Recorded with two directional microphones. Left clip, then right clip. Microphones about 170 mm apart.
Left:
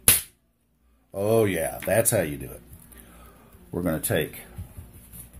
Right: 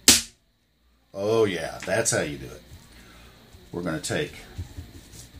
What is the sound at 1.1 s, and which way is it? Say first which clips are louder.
Speech: even; 40° left (ahead or behind).